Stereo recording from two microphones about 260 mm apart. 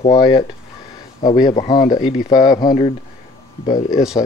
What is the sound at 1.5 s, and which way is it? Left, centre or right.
Speech, centre.